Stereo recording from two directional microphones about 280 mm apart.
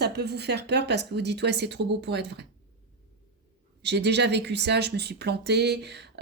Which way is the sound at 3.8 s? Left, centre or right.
Right.